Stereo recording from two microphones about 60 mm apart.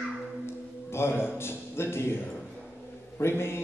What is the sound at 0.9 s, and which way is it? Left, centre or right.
A man's voice, left.